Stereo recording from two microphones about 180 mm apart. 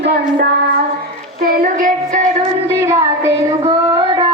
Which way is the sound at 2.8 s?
15° right (ahead or behind).